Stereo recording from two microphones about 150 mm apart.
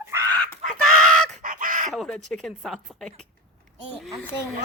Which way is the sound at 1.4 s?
60° right (ahead or behind).